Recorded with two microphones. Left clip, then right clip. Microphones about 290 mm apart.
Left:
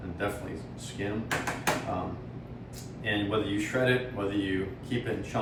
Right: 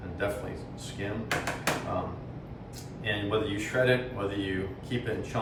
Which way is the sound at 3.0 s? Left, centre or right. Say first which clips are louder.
Even; centre.